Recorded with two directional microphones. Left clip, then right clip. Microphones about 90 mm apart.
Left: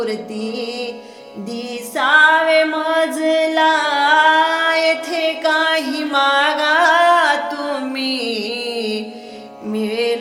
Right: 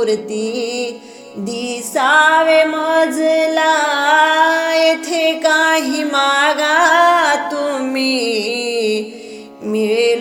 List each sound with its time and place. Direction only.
0.0 s music: 45° right (ahead or behind)
1.6 s female singing: 50° right (ahead or behind)
9.7 s music: 45° right (ahead or behind)